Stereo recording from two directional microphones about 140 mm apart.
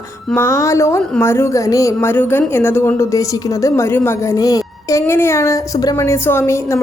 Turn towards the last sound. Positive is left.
turn(degrees=20)  # may be behind; listen again after turning